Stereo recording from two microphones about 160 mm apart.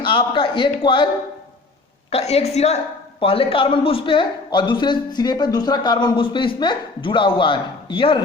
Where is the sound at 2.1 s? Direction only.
40° left (ahead or behind).